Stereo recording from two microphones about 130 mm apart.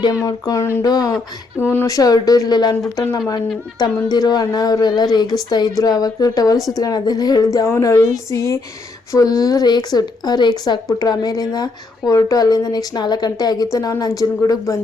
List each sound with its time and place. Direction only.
0.0 s a woman's voice: 30° left (ahead or behind)
1.1 s a woman's voice: 15° left (ahead or behind)